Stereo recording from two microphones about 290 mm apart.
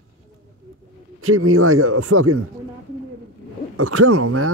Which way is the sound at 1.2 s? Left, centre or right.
Right.